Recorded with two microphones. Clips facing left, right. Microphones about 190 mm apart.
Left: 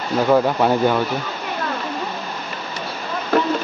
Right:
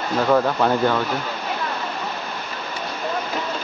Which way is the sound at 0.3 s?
10° left (ahead or behind).